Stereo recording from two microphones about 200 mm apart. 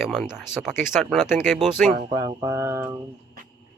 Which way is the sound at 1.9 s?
40° right (ahead or behind).